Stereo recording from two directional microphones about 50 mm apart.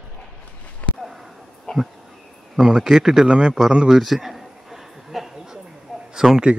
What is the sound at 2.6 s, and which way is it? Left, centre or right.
Speech, centre.